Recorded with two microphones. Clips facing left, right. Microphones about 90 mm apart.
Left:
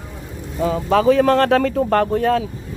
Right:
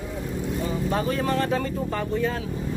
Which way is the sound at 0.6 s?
90° left.